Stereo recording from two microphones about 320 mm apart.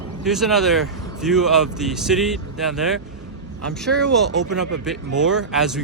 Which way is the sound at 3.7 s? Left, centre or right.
Centre.